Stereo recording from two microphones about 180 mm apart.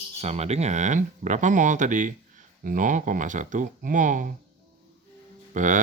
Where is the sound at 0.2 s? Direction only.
35° right (ahead or behind).